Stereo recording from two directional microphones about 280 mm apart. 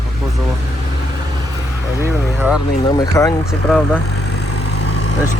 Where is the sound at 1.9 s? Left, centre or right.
Centre.